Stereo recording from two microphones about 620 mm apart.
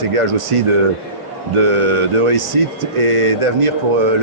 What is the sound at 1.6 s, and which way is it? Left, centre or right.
Speech, right.